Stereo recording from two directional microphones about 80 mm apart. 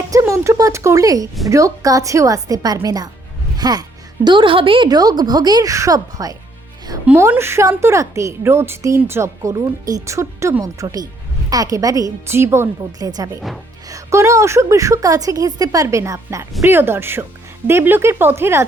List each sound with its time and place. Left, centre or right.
0.1 s a sound: right
1.5 s a woman's voice: right
5.7 s a woman's voice: right
7.2 s speech: right
10.6 s a woman's voice: right
12.3 s speech: right
13.0 s a woman's voice: right
13.8 s a woman's voice: right
16.6 s speech: right